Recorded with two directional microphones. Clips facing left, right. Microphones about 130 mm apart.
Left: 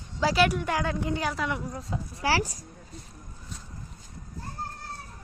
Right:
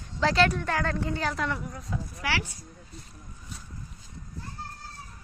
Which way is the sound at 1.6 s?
30° left (ahead or behind).